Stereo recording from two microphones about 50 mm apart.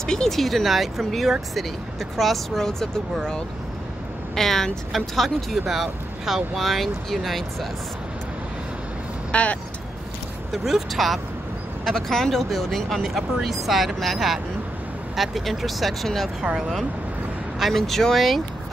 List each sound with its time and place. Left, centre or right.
0.0 s speech: centre
9.3 s speech: left
10.5 s speech: centre
16.3 s speech: centre
17.6 s speech: centre